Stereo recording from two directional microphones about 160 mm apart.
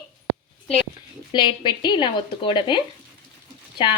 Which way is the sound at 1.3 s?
30° left (ahead or behind).